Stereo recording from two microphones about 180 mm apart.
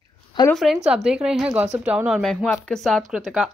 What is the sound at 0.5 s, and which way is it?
A woman's voice, centre (ahead or behind).